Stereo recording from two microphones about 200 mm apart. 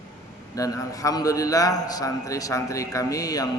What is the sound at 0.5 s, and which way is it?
A man's voice, 15° left (ahead or behind).